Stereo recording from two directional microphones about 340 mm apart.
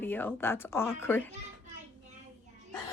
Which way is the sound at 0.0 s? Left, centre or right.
Centre.